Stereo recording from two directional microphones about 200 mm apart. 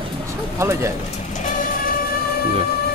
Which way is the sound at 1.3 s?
40° left (ahead or behind).